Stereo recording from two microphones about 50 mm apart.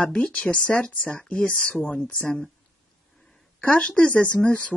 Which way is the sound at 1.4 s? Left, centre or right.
Left.